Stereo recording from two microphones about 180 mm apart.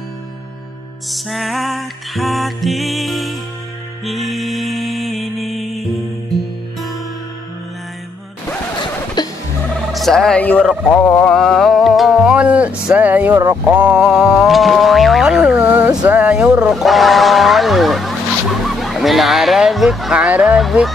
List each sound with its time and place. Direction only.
1.1 s music: centre (ahead or behind)
9.2 s music: 20° left (ahead or behind)
9.9 s a sound: centre (ahead or behind)
13.4 s music: 15° right (ahead or behind)
16.1 s a sound: 5° right (ahead or behind)
18.6 s speech: centre (ahead or behind)